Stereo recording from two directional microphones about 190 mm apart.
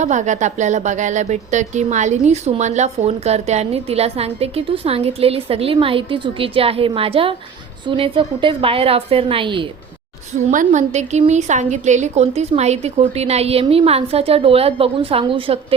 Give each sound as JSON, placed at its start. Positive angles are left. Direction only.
{"t": 0.0, "sound": "a woman's voice", "side_deg": -40}
{"t": 10.5, "sound": "speech", "side_deg": -40}